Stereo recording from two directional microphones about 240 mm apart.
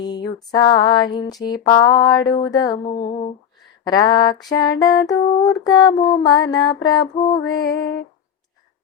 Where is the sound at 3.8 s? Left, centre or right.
Centre.